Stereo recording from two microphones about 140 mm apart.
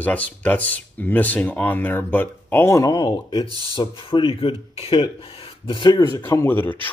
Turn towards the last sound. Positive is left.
turn(degrees=15)  # may be behind; listen again after turning